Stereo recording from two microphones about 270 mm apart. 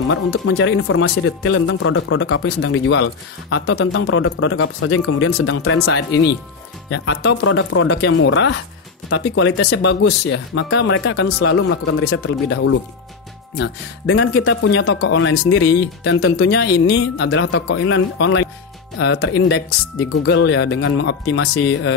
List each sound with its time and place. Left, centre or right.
0.3 s speech: left